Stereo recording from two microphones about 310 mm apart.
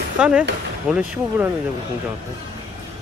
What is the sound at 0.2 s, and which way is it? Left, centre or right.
Speech, centre.